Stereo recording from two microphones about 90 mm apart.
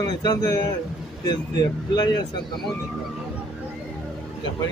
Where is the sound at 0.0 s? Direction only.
45° left (ahead or behind).